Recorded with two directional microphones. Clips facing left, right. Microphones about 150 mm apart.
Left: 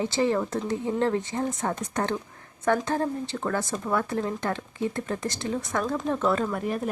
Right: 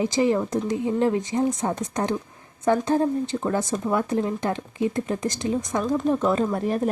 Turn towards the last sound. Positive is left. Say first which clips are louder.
# right 4 dB
turn(degrees=-35)  # may be behind; listen again after turning